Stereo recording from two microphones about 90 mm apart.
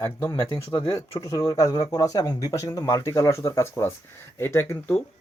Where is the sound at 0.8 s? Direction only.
30° left (ahead or behind).